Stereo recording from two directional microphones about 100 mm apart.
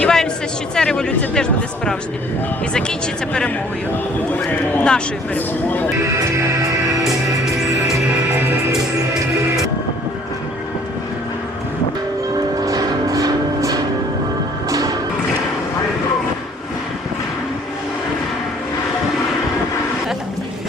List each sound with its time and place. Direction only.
0.0 s a sound: 5° left (ahead or behind)
0.8 s speech: 5° left (ahead or behind)
4.7 s speech: 10° left (ahead or behind)
6.1 s music: 35° right (ahead or behind)
12.6 s music: 35° right (ahead or behind)